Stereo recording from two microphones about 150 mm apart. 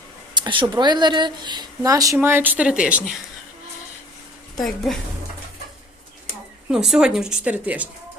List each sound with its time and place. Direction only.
0.3 s speech: 30° right (ahead or behind); by 3.2 s 5° right (ahead or behind)
4.5 s a woman's voice: centre (ahead or behind)
6.7 s a woman's voice: 5° right (ahead or behind)